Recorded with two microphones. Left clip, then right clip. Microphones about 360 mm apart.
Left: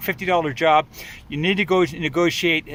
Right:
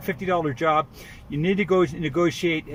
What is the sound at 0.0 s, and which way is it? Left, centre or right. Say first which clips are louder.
Speech: left 4 dB; centre.